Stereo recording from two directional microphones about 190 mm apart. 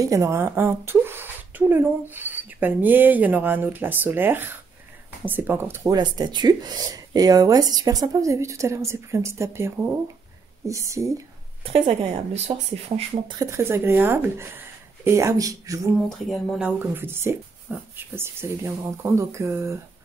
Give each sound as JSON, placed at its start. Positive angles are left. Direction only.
{"t": 0.0, "sound": "speech", "side_deg": -15}
{"t": 11.6, "sound": "a woman's voice", "side_deg": -30}
{"t": 13.4, "sound": "speech", "side_deg": -15}
{"t": 16.3, "sound": "speech", "side_deg": 0}